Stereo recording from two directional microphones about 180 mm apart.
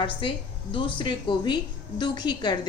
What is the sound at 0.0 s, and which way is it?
A woman's voice, 30° left (ahead or behind).